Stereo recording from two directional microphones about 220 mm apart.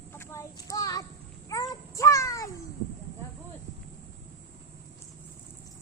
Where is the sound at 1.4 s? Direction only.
15° left (ahead or behind).